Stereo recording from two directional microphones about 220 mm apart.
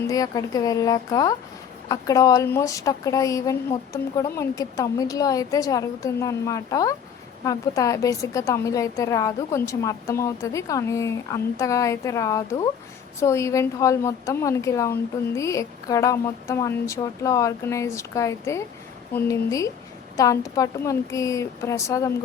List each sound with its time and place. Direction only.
0.1 s a woman's voice: 15° left (ahead or behind)